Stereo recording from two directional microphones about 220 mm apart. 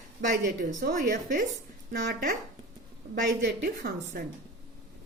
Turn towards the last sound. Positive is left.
turn(degrees=-40)  # may be behind; listen again after turning